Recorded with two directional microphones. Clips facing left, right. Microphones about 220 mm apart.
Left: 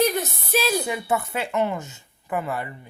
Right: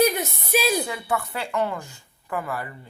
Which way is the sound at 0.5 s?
10° right (ahead or behind).